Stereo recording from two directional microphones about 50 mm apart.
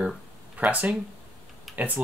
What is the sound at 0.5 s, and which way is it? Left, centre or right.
Speech, right.